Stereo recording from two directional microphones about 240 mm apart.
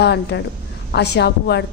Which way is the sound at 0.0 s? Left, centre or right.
Left.